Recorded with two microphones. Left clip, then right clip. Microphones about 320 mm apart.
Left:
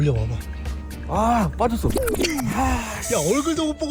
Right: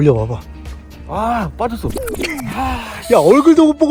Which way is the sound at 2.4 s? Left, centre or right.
Centre.